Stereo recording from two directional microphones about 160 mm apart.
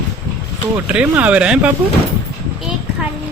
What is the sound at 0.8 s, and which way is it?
Speech, 10° right (ahead or behind).